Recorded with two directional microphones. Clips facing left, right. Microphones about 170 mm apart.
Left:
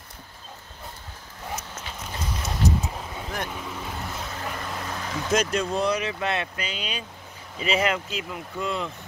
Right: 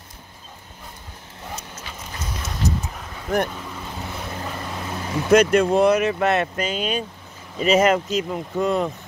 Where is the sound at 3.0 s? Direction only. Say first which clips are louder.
Left 2 dB; 20° left (ahead or behind).